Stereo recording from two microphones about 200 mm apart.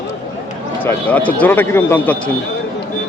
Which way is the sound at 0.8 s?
10° left (ahead or behind).